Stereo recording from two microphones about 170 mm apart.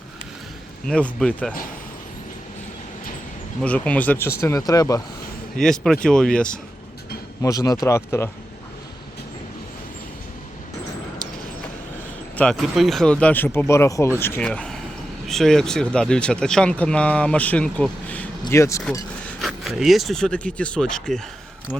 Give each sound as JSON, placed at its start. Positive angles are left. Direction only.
{"t": 0.9, "sound": "speech", "side_deg": 5}
{"t": 3.6, "sound": "speech", "side_deg": 10}
{"t": 5.5, "sound": "speech", "side_deg": 5}
{"t": 7.4, "sound": "speech", "side_deg": 20}
{"t": 12.4, "sound": "speech", "side_deg": 0}
{"t": 19.4, "sound": "speech", "side_deg": 0}